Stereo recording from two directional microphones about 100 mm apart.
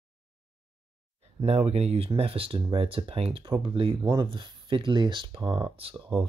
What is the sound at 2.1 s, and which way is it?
Speech, 70° right (ahead or behind).